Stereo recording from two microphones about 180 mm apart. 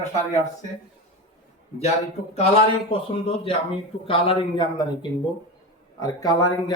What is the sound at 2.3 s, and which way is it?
Speech, 35° left (ahead or behind).